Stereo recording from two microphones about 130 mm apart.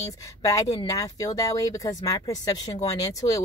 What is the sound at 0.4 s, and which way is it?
Speech, 30° left (ahead or behind).